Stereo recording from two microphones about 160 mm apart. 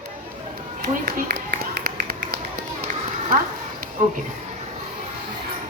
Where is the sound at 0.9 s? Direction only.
70° right (ahead or behind).